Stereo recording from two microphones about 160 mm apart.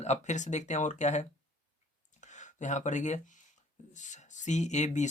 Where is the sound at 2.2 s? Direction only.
50° left (ahead or behind).